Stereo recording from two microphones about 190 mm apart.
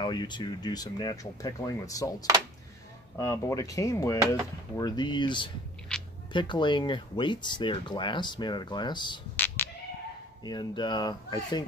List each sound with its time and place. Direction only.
0.0 s speech: 25° left (ahead or behind)
9.6 s cat: 10° left (ahead or behind)
10.4 s speech: 20° left (ahead or behind)